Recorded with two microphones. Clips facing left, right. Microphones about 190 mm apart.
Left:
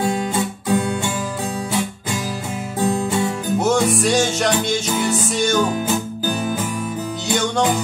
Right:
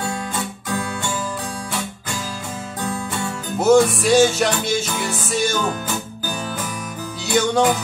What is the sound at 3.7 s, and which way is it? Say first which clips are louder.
Music: right 7 dB; 5° right (ahead or behind).